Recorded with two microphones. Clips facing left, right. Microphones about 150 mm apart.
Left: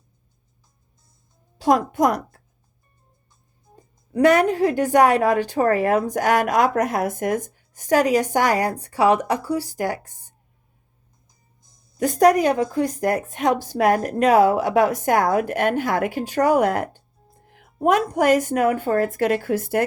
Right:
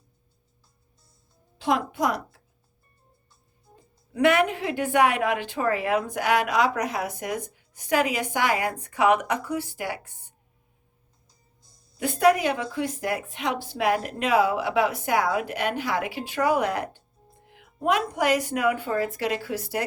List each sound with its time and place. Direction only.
1.5 s a woman's voice: 40° left (ahead or behind)
4.1 s a woman's voice: 40° left (ahead or behind)
11.3 s music: 15° left (ahead or behind)
11.9 s speech: 45° left (ahead or behind)
17.4 s music: 45° left (ahead or behind)
18.1 s speech: 45° left (ahead or behind)